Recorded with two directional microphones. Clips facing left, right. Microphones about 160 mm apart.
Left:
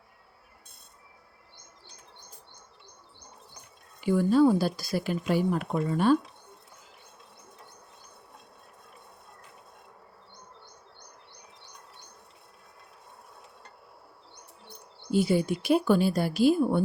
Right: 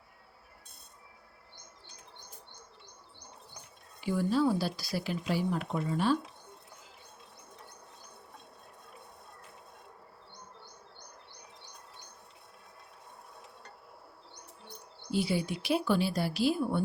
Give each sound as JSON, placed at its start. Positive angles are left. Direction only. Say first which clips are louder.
{"t": 4.0, "sound": "speech", "louder": "left 7 dB", "side_deg": 55}
{"t": 15.1, "sound": "speech", "louder": "left 6 dB", "side_deg": 45}